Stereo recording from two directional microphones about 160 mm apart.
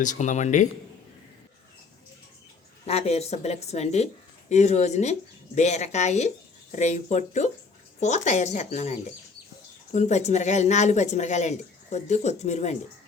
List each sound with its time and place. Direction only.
0.0 s speech: 50° left (ahead or behind)
2.8 s speech: 40° left (ahead or behind)